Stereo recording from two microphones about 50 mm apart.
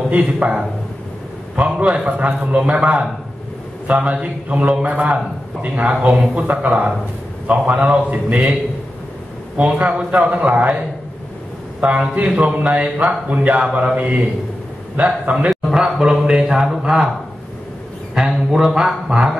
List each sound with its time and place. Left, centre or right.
0.1 s a man's voice: right
1.6 s a man's voice: right
9.6 s a man's voice: right
11.8 s a man's voice: right; by 17.1 s centre
18.1 s a man's voice: centre